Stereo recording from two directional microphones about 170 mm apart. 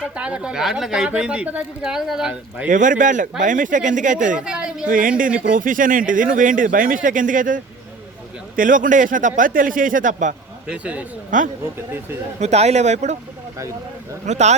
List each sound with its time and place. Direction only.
0.1 s a woman's voice: 5° right (ahead or behind)
2.6 s speech: 50° right (ahead or behind)
4.4 s a woman's voice: 5° right (ahead or behind)
4.9 s speech: 55° right (ahead or behind)
10.7 s speech: 5° right (ahead or behind)
11.3 s speech: 50° right (ahead or behind)
14.3 s speech: 40° right (ahead or behind)